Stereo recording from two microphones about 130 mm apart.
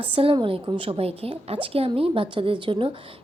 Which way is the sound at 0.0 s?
45° right (ahead or behind).